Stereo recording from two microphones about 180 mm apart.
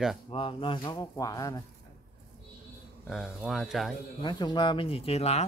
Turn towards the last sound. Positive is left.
turn(degrees=35)  # may be behind; listen again after turning